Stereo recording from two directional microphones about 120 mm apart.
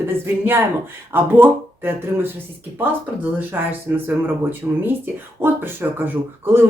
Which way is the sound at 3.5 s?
15° right (ahead or behind).